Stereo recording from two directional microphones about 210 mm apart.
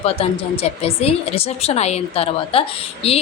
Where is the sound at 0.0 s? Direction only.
30° left (ahead or behind).